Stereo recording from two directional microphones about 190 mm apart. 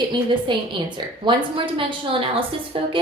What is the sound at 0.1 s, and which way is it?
A woman's voice, 25° right (ahead or behind).